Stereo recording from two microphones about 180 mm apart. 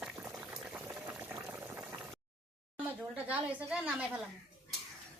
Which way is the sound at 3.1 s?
10° right (ahead or behind).